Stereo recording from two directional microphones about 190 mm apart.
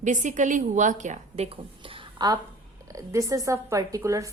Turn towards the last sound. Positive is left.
turn(degrees=-15)  # may be behind; listen again after turning